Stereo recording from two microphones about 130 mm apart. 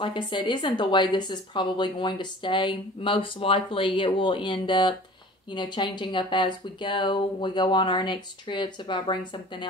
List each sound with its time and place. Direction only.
0.0 s a woman's voice: 40° left (ahead or behind)